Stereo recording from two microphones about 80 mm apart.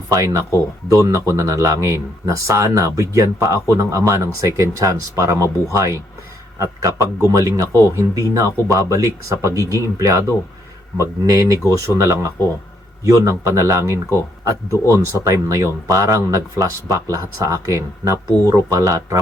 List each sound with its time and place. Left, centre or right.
0.1 s speech: right